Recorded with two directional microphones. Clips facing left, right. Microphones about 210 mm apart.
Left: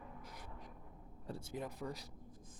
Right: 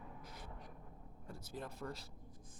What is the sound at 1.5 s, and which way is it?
Speech, 15° left (ahead or behind).